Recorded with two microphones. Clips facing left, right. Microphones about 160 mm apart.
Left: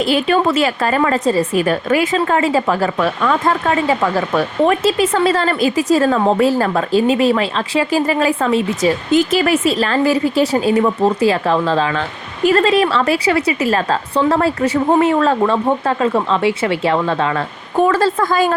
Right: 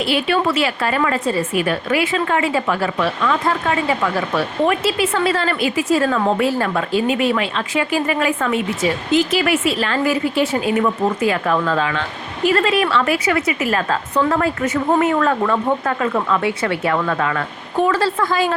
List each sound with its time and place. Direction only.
0.0 s a woman's voice: 45° left (ahead or behind); by 17.4 s 25° left (ahead or behind)
17.7 s speech: 45° left (ahead or behind)